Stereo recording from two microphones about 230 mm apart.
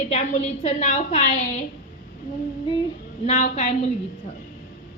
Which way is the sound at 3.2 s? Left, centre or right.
Left.